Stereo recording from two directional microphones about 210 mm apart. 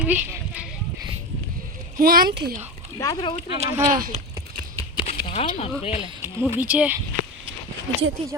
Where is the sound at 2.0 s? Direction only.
45° right (ahead or behind).